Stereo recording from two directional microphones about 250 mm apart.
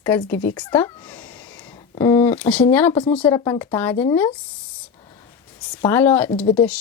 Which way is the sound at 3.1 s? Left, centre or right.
Centre.